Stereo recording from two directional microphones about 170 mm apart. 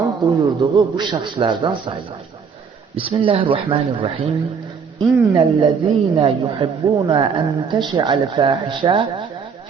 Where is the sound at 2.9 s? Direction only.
30° right (ahead or behind).